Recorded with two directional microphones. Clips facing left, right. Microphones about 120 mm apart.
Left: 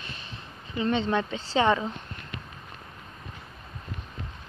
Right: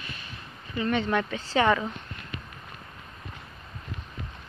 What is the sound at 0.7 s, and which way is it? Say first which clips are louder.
A woman's voice: even; 25° left (ahead or behind).